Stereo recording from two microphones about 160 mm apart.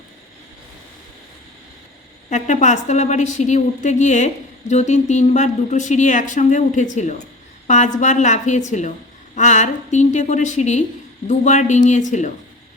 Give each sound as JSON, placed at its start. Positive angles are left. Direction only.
{"t": 2.3, "sound": "a woman's voice", "side_deg": 50}